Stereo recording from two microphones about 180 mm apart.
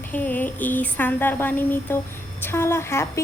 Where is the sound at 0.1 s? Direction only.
10° left (ahead or behind).